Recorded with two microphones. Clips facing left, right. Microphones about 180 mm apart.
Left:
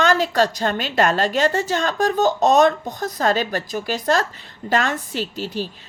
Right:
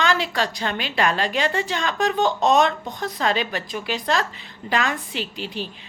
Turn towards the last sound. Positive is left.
turn(degrees=40)  # may be behind; listen again after turning